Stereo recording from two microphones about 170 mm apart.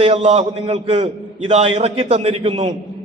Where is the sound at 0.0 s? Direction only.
35° right (ahead or behind).